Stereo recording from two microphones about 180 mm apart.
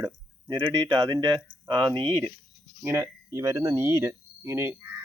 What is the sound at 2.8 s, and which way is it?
Speech, 15° right (ahead or behind).